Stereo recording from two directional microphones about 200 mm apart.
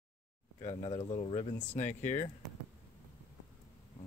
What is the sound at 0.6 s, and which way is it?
Speech, 30° left (ahead or behind).